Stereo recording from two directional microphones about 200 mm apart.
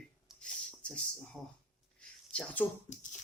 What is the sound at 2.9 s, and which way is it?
Speech, 40° left (ahead or behind).